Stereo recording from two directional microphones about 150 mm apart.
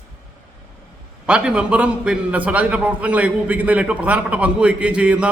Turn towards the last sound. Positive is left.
turn(degrees=-5)  # may be behind; listen again after turning